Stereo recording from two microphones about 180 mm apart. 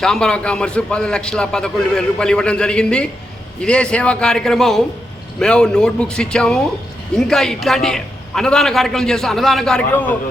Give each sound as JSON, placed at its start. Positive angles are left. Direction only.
{"t": 0.0, "sound": "a man's voice", "side_deg": 5}